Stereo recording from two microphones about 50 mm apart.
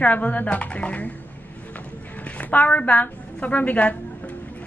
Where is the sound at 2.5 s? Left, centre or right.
Left.